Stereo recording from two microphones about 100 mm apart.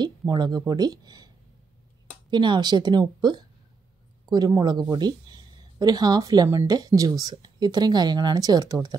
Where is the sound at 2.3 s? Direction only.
50° right (ahead or behind).